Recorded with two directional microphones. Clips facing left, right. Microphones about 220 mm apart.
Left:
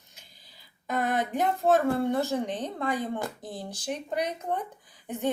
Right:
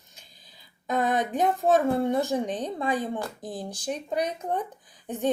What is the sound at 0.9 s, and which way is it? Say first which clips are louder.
A woman's voice: right 2 dB; 15° right (ahead or behind).